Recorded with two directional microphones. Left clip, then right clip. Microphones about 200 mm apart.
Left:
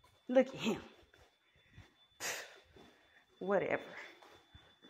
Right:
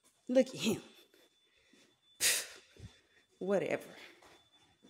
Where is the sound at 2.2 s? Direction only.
35° right (ahead or behind).